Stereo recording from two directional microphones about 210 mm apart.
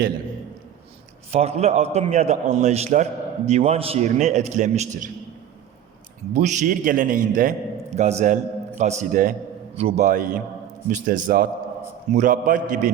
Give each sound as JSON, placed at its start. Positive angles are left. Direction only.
{"t": 1.3, "sound": "a man's voice", "side_deg": -30}
{"t": 6.3, "sound": "a man's voice", "side_deg": -35}